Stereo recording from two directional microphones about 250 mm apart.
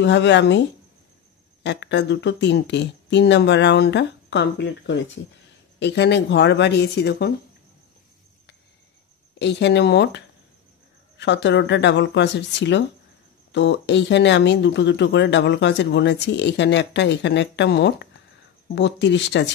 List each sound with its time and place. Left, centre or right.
0.0 s speech: left
9.4 s speech: left